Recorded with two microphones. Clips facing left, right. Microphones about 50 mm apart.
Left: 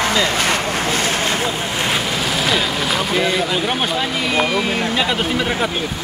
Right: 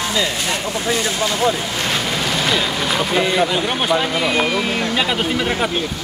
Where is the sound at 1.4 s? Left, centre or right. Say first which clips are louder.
Right 2 dB; centre.